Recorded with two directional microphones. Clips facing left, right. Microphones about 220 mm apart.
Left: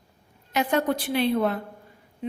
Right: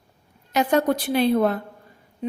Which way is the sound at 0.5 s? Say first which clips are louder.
Right 4 dB; 40° right (ahead or behind).